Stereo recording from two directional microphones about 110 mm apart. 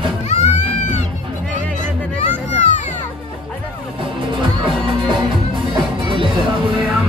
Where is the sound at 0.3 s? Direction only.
90° left.